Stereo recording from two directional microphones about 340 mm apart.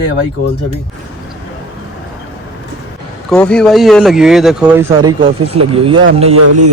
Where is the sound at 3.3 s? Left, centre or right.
Centre.